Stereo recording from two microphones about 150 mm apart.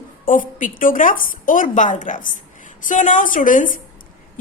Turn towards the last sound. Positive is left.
turn(degrees=60)  # may be behind; listen again after turning